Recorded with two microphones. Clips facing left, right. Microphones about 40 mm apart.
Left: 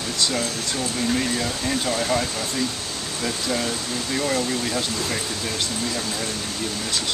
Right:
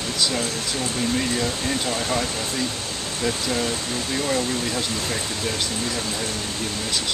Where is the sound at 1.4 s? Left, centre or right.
Centre.